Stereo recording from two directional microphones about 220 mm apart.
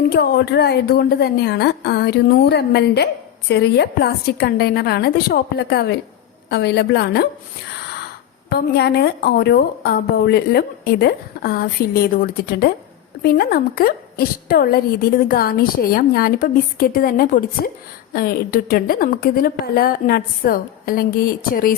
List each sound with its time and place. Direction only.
0.1 s a woman's voice: 45° left (ahead or behind)
8.4 s a woman's voice: 45° left (ahead or behind)